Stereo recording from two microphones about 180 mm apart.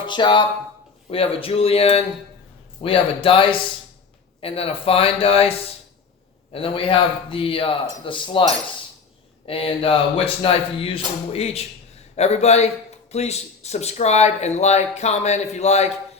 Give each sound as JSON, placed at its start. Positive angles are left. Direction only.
{"t": 0.0, "sound": "speech", "side_deg": 25}
{"t": 9.5, "sound": "speech", "side_deg": 30}